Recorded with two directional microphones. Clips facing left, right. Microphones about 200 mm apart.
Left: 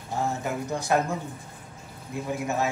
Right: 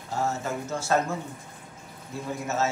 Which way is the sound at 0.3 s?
15° left (ahead or behind).